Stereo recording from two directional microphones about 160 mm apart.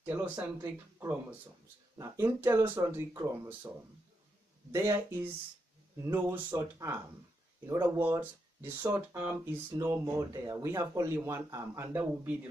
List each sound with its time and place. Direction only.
0.0 s speech: 10° right (ahead or behind)
4.7 s speech: 20° right (ahead or behind)